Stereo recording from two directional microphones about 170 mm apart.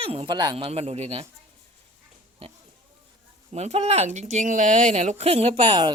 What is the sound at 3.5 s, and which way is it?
Speech, 40° right (ahead or behind).